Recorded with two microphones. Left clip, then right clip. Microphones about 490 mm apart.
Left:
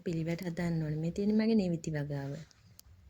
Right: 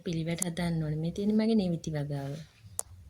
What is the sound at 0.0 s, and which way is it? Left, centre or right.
Speech, right.